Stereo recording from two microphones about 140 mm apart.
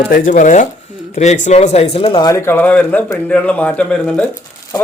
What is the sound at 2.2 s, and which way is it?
Speech, 20° left (ahead or behind).